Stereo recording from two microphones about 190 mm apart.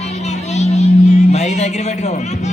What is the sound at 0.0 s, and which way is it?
Music, 35° left (ahead or behind).